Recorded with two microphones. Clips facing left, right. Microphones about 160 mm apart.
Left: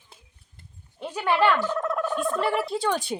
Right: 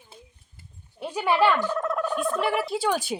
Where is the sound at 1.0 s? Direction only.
10° right (ahead or behind).